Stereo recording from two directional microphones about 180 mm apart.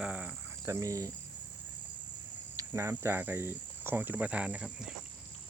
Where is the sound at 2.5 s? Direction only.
15° right (ahead or behind).